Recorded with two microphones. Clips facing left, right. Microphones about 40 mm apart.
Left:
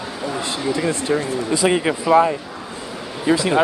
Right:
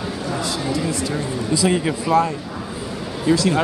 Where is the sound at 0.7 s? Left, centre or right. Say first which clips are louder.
Left 3 dB; left.